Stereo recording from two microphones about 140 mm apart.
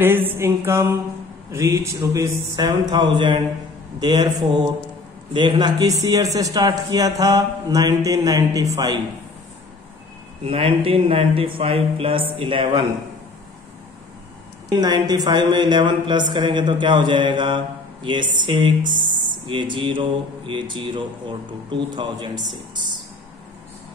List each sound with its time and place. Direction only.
0.0 s mantra: 15° right (ahead or behind)
1.5 s a man's voice: 20° right (ahead or behind)
5.3 s a man's voice: 35° right (ahead or behind)
10.4 s speech: 45° right (ahead or behind)
14.8 s speech: 30° right (ahead or behind)
18.8 s speech: 70° right (ahead or behind)
19.4 s speech: 35° right (ahead or behind)